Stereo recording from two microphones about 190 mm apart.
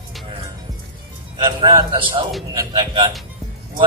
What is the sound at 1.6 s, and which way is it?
A man's voice, 20° right (ahead or behind).